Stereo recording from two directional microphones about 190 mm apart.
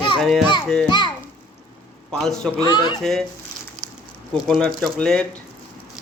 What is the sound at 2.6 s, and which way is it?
Speech, 25° left (ahead or behind).